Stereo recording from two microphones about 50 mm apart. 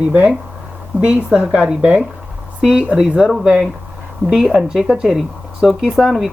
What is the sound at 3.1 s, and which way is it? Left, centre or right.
Speech, centre.